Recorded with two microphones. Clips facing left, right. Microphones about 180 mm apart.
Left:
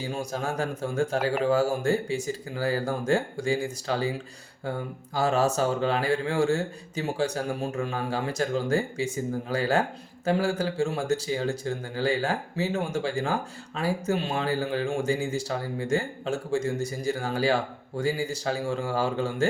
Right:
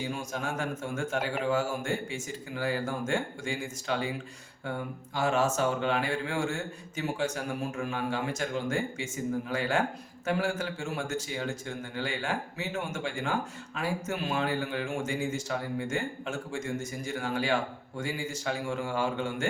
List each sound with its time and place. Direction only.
0.0 s speech: 35° left (ahead or behind)
5.1 s speech: 35° left (ahead or behind)